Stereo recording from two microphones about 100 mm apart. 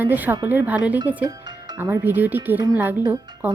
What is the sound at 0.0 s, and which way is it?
A woman's voice, 20° right (ahead or behind).